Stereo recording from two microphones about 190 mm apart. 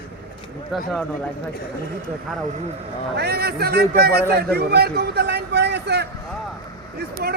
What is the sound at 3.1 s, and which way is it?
A man's voice, 55° right (ahead or behind).